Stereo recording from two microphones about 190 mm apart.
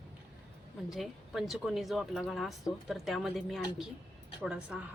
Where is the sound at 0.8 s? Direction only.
Centre (ahead or behind).